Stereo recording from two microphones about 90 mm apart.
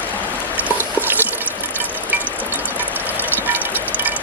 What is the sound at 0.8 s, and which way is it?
Drip, 20° right (ahead or behind).